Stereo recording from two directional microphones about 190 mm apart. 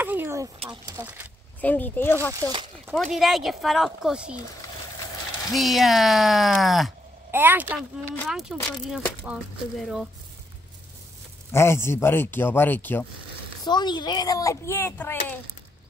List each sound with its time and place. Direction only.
0.0 s vehicle: 10° right (ahead or behind)
0.6 s speech: 20° right (ahead or behind)
1.6 s speech: 10° left (ahead or behind)
5.5 s speech: centre (ahead or behind)
11.5 s speech: 15° left (ahead or behind)
13.7 s speech: 20° left (ahead or behind)